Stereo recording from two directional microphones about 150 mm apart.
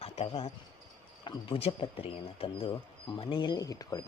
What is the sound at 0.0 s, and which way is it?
Speech, 40° left (ahead or behind).